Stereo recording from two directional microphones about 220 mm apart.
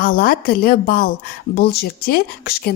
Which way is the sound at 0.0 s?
40° left (ahead or behind).